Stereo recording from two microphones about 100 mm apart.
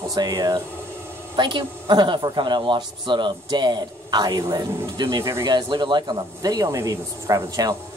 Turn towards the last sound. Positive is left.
turn(degrees=-35)  # may be behind; listen again after turning